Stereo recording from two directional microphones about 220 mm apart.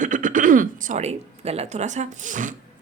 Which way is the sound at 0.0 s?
35° right (ahead or behind).